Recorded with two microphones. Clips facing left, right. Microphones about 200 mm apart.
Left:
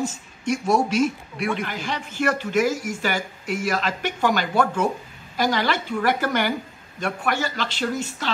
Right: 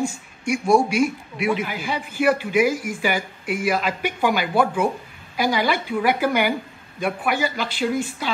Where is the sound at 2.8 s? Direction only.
45° left (ahead or behind).